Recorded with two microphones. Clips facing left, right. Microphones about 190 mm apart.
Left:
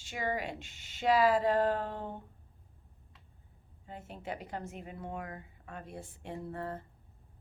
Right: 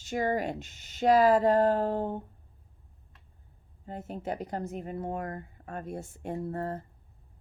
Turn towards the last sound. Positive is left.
turn(degrees=-40)  # may be behind; listen again after turning